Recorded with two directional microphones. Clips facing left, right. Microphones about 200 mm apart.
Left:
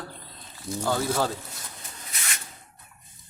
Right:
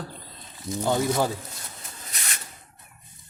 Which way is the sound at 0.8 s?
15° right (ahead or behind).